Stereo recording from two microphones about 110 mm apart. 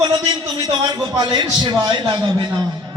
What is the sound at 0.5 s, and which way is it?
A man's voice, 45° right (ahead or behind).